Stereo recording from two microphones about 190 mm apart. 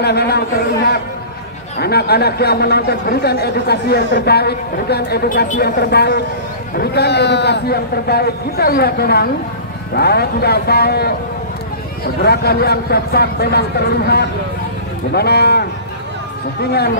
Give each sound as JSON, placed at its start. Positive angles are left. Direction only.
{"t": 0.0, "sound": "a man's voice", "side_deg": 60}
{"t": 1.8, "sound": "a man's voice", "side_deg": 55}
{"t": 12.2, "sound": "a man's voice", "side_deg": 55}